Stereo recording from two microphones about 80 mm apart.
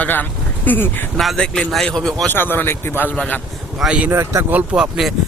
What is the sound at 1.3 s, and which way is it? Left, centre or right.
Speech, centre.